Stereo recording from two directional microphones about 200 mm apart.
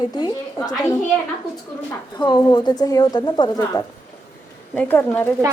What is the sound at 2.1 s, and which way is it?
A woman's voice, 20° left (ahead or behind).